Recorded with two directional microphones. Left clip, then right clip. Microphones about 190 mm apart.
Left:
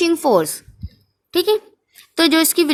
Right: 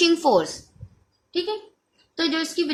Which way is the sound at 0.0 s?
35° left (ahead or behind).